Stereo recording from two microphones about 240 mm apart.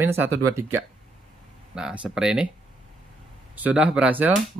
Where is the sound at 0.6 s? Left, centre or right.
Centre.